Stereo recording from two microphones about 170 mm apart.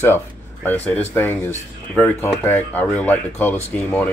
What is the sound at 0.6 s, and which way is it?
Speech, 10° left (ahead or behind).